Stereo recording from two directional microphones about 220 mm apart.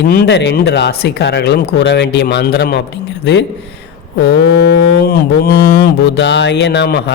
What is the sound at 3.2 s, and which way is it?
Speech, 50° left (ahead or behind).